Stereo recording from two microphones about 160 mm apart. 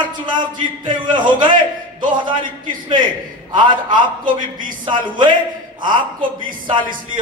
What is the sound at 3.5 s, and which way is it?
A man's voice, 30° right (ahead or behind).